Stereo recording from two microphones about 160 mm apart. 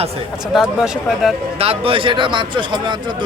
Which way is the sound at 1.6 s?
35° right (ahead or behind).